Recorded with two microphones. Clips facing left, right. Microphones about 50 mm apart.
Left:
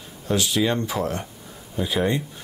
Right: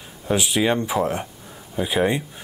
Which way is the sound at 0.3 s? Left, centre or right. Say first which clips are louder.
Right 2 dB; centre.